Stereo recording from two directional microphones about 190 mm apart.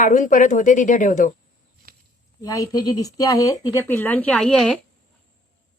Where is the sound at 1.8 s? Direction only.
50° right (ahead or behind).